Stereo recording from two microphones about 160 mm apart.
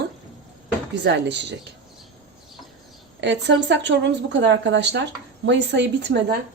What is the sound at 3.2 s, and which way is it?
A woman's voice, 90° right.